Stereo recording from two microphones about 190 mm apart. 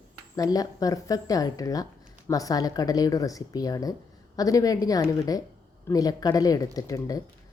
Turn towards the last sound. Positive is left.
turn(degrees=20)  # may be behind; listen again after turning